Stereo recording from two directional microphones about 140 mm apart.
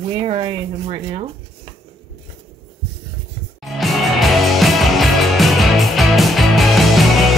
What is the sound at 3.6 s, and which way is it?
Music, centre (ahead or behind).